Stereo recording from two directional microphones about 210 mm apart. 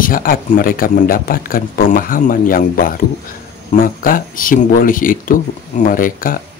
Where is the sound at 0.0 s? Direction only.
40° left (ahead or behind).